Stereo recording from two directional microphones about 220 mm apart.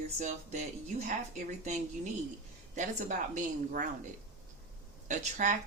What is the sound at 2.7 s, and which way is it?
A woman's voice, 35° right (ahead or behind).